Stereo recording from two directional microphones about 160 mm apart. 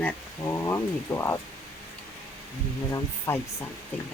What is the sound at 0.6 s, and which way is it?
Speech, 15° left (ahead or behind).